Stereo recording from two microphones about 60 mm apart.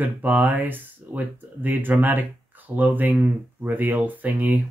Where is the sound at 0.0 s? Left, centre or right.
Right.